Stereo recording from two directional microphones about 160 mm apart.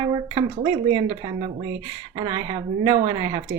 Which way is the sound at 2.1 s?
30° right (ahead or behind).